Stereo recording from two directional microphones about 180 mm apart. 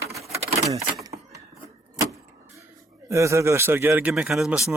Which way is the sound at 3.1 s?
15° right (ahead or behind).